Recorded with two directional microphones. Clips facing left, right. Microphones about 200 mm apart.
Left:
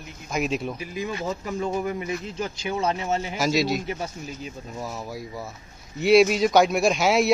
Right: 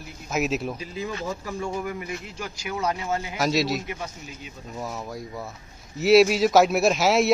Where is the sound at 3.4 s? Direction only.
Centre (ahead or behind).